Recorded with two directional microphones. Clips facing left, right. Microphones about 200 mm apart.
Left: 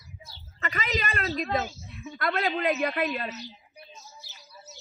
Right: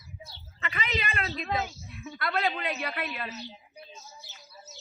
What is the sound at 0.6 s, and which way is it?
A woman's voice, 40° left (ahead or behind).